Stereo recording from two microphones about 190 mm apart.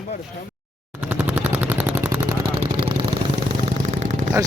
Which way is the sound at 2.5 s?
25° right (ahead or behind).